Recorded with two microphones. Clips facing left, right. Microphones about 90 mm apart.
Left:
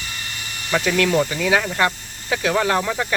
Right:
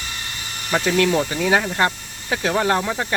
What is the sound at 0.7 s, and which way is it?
Speech, 25° right (ahead or behind).